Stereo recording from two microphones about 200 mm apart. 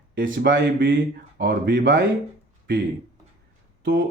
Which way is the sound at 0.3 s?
50° right (ahead or behind).